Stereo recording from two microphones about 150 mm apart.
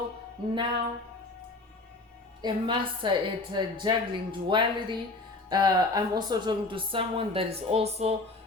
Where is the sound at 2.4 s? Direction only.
30° right (ahead or behind).